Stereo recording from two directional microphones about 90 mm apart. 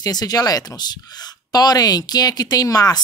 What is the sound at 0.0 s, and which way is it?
Speech, 45° left (ahead or behind).